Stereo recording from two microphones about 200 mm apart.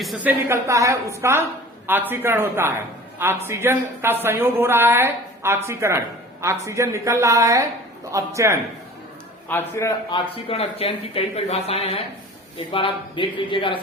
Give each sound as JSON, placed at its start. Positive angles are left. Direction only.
{"t": 0.0, "sound": "speech", "side_deg": -5}
{"t": 9.5, "sound": "a man's voice", "side_deg": 10}
{"t": 10.1, "sound": "speech", "side_deg": 30}